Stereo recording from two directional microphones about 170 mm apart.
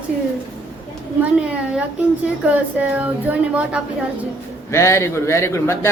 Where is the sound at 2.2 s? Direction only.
5° right (ahead or behind).